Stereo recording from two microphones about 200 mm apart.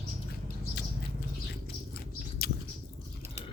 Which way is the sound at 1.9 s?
50° left (ahead or behind).